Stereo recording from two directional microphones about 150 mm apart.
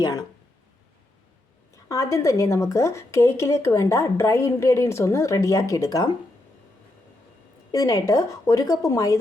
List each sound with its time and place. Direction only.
0.0 s a woman's voice: 25° left (ahead or behind)
1.7 s a woman's voice: 20° left (ahead or behind)
7.7 s a woman's voice: 25° left (ahead or behind)